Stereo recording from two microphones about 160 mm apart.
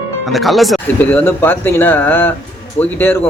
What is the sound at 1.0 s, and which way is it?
A man's voice, 10° left (ahead or behind).